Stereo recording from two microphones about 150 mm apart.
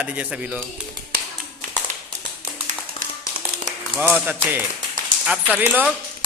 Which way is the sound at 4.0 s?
15° right (ahead or behind).